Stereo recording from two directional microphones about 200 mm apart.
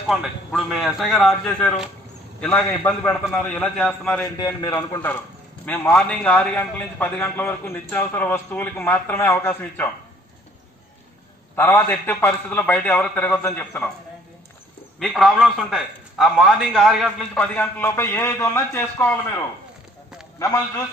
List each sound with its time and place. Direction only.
0.1 s a man's voice: centre (ahead or behind)
4.4 s a man's voice: 15° left (ahead or behind)
11.5 s a man's voice: 10° left (ahead or behind)
15.0 s a man's voice: centre (ahead or behind)
20.3 s a man's voice: 15° left (ahead or behind)